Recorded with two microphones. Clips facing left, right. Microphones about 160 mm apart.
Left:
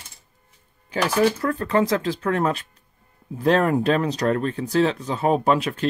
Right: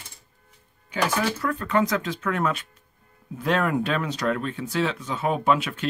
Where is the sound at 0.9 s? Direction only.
35° left (ahead or behind).